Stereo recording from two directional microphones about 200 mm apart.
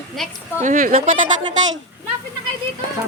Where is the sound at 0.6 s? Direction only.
40° right (ahead or behind).